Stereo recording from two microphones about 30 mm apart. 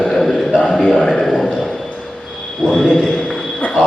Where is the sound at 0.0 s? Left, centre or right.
Centre.